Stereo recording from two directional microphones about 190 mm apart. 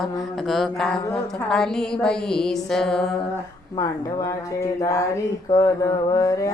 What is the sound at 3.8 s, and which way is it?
Mantra, 15° left (ahead or behind).